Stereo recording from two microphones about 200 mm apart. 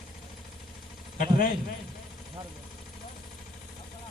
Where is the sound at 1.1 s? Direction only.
40° left (ahead or behind).